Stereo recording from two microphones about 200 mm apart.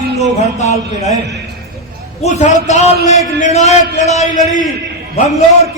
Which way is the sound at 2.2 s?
35° left (ahead or behind).